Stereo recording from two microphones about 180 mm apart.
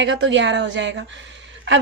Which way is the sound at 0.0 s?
85° right.